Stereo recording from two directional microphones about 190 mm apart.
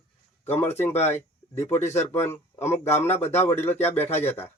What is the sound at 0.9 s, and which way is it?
Speech, 35° left (ahead or behind).